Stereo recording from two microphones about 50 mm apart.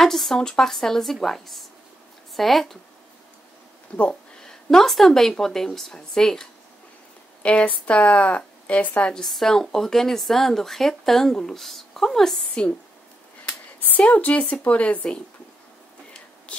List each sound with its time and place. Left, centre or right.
0.0 s speech: centre
4.1 s speech: centre
7.4 s a woman's voice: left
9.2 s speech: centre
13.8 s a woman's voice: left
16.5 s whispering: left